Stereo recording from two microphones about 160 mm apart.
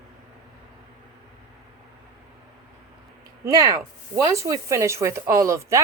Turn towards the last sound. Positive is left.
turn(degrees=-20)  # may be behind; listen again after turning